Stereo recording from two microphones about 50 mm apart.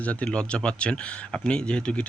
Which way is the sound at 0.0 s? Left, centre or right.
Left.